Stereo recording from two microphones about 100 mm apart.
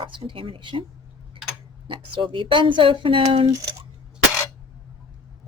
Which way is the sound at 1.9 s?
55° right (ahead or behind).